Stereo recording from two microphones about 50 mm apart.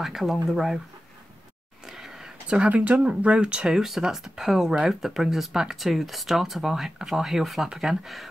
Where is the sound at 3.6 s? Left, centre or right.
Centre.